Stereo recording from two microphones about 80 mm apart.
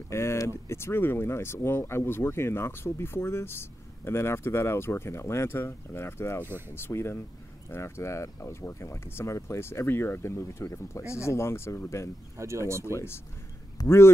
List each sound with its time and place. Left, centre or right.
0.1 s speech: left
12.4 s speech: right
12.9 s speech: left